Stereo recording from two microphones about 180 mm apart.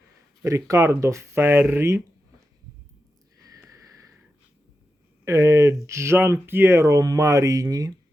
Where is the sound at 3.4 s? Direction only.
20° right (ahead or behind).